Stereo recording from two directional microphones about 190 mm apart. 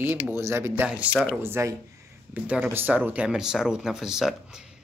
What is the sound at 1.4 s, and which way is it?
Speech, 15° right (ahead or behind).